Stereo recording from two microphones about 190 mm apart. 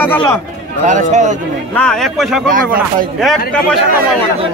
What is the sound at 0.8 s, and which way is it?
Speech, 40° right (ahead or behind).